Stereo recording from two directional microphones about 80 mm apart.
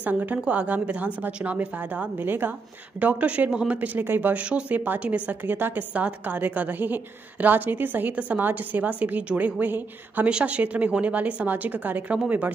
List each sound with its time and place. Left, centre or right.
0.0 s speech: right